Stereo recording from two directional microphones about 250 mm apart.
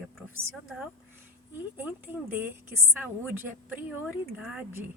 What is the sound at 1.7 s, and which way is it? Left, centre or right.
Speech, centre.